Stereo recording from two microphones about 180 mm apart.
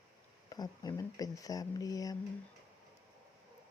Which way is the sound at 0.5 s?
20° left (ahead or behind).